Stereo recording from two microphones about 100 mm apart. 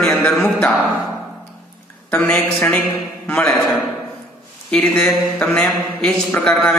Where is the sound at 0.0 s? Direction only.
10° left (ahead or behind).